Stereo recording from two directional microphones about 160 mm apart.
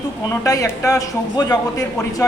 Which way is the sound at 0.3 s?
20° left (ahead or behind).